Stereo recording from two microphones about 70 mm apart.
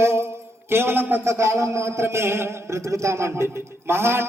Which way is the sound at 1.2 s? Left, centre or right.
Right.